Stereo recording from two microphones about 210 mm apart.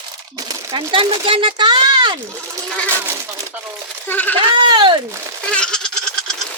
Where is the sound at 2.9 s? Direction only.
10° right (ahead or behind).